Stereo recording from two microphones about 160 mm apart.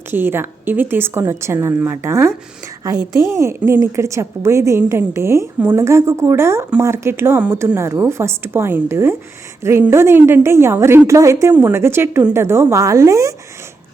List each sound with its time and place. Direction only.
0.1 s a woman's voice: 15° right (ahead or behind)